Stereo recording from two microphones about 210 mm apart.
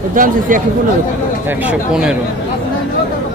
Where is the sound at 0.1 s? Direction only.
40° right (ahead or behind).